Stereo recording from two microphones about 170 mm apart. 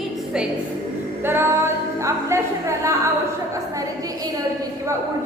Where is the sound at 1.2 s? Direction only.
15° right (ahead or behind).